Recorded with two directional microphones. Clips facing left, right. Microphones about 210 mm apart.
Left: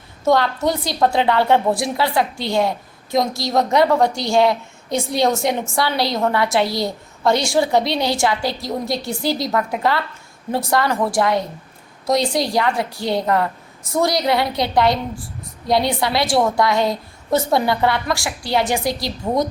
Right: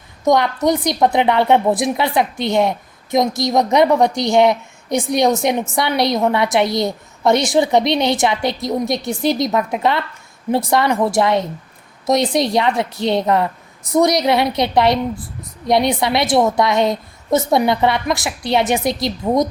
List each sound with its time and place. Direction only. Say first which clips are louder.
0.3 s a woman's voice: right 2 dB; 20° right (ahead or behind)